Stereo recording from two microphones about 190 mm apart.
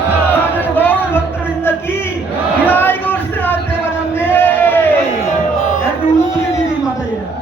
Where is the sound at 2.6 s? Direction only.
10° left (ahead or behind).